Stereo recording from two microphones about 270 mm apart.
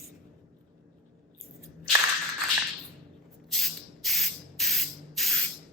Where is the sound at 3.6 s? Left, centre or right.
Centre.